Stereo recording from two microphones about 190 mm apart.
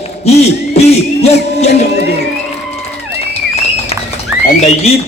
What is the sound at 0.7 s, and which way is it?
Speech, 35° left (ahead or behind).